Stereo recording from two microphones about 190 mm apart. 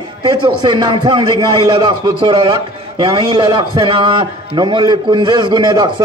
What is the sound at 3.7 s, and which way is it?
A man's voice, 25° right (ahead or behind).